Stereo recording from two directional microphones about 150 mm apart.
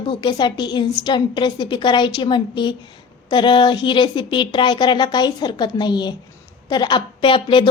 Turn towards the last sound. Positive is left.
turn(degrees=35)  # may be behind; listen again after turning